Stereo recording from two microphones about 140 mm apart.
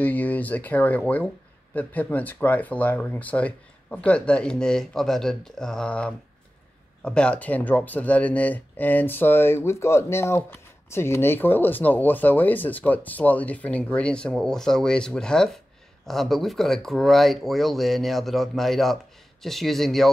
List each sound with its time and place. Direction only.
0.0 s speech: 10° left (ahead or behind)